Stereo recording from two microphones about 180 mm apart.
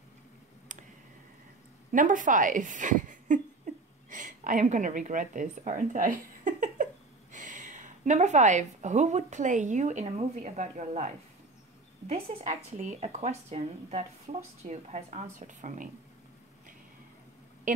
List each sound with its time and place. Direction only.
1.9 s a woman's voice: 45° right (ahead or behind)
12.1 s speech: 45° right (ahead or behind)